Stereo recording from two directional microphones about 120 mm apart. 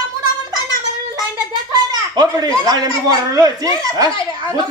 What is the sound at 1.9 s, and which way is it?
Speech, 35° right (ahead or behind).